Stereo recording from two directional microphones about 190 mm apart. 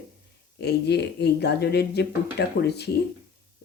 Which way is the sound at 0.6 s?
60° left (ahead or behind).